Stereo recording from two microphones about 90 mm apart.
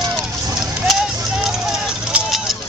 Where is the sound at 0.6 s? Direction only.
5° right (ahead or behind).